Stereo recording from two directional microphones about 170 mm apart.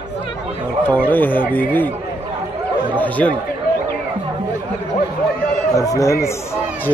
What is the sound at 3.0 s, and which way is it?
Speech, 10° left (ahead or behind).